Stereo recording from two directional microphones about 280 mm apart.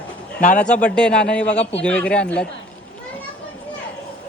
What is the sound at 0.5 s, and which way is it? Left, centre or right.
A man's voice, centre.